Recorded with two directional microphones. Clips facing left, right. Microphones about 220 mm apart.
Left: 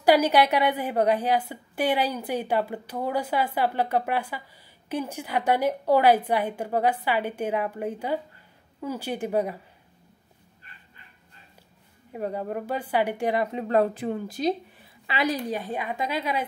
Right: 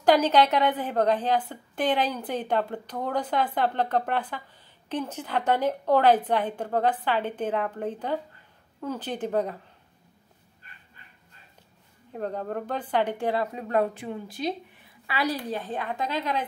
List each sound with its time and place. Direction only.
0.0 s a woman's voice: 10° left (ahead or behind)
12.1 s a woman's voice: 10° left (ahead or behind); by 14.0 s 30° left (ahead or behind)
14.0 s speech: 45° left (ahead or behind)
15.0 s a woman's voice: 20° left (ahead or behind)